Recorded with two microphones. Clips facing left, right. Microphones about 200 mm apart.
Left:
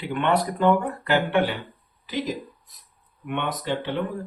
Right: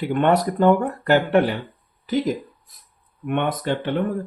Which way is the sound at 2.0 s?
50° right (ahead or behind).